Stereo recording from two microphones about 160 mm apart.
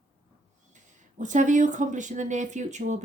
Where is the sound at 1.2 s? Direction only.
50° right (ahead or behind).